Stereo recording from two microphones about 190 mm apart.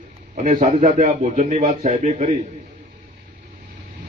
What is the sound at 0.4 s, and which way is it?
Speech, 40° right (ahead or behind).